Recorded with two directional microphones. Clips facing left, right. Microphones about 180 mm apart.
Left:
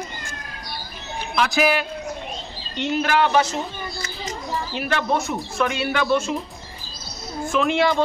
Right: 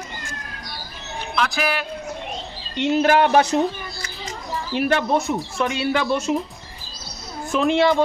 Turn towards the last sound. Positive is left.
turn(degrees=-25)  # may be behind; listen again after turning